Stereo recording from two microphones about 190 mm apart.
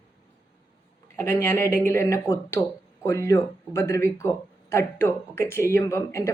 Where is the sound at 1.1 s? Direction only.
10° left (ahead or behind).